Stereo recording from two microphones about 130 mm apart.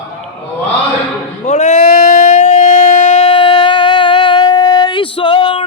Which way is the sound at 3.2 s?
40° left (ahead or behind).